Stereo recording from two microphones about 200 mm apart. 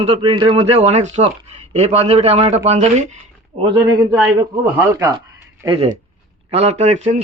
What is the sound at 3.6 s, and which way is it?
Speech, 20° right (ahead or behind).